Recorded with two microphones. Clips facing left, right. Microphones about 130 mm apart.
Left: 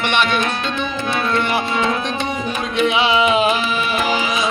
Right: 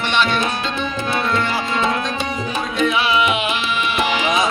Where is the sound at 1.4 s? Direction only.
15° left (ahead or behind).